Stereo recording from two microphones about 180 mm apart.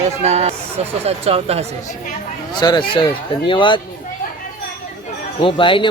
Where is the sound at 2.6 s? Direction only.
25° left (ahead or behind).